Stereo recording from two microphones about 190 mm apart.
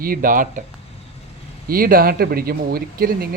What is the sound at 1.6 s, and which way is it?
Speech, 50° right (ahead or behind).